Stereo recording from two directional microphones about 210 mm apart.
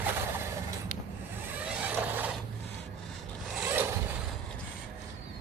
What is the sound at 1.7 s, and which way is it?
Vehicle, 5° right (ahead or behind).